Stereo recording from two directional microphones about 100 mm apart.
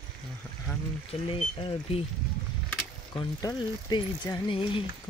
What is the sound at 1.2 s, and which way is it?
Speech, 65° left (ahead or behind).